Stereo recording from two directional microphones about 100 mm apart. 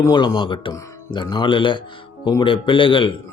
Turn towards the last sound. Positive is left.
turn(degrees=55)  # may be behind; listen again after turning